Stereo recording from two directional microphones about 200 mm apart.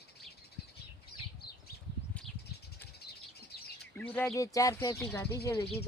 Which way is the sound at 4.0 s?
5° left (ahead or behind).